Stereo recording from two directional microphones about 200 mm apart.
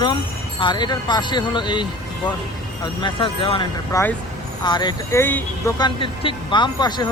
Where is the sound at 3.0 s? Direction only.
25° left (ahead or behind); by 5.7 s 10° left (ahead or behind).